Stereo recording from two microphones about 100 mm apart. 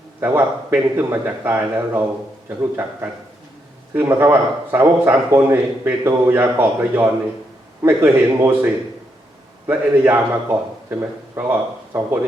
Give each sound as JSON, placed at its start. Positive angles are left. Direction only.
{"t": 0.2, "sound": "a man's voice", "side_deg": -20}
{"t": 3.9, "sound": "a man's voice", "side_deg": -25}